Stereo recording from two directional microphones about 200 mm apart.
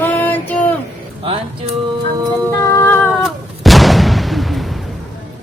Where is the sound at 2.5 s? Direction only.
10° left (ahead or behind).